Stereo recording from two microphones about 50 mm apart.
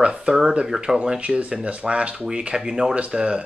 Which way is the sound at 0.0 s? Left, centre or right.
Centre.